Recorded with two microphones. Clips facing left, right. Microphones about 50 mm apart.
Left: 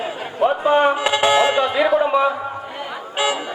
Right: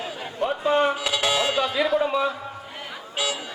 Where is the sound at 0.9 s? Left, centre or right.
Left.